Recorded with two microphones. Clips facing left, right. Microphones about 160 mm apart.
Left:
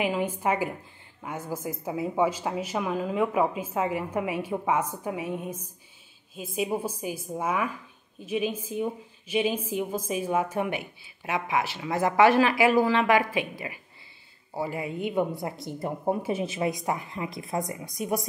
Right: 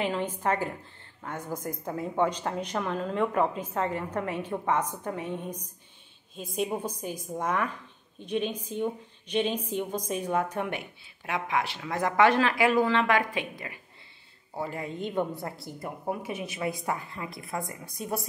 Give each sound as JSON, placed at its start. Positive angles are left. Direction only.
{"t": 0.0, "sound": "a woman's voice", "side_deg": 10}